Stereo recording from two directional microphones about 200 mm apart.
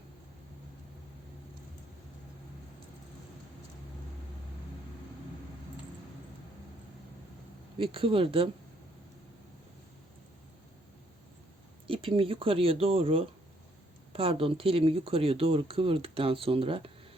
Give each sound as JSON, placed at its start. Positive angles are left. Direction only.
{"t": 7.8, "sound": "speech", "side_deg": -25}
{"t": 11.9, "sound": "speech", "side_deg": -25}